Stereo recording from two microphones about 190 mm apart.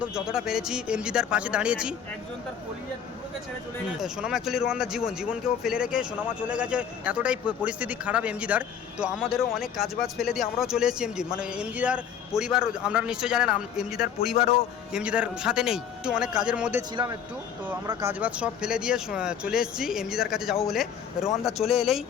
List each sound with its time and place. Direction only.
0.0 s speech: 5° right (ahead or behind)
4.0 s speech: 5° right (ahead or behind)
16.9 s speech: 25° right (ahead or behind)
17.8 s speech: 10° right (ahead or behind)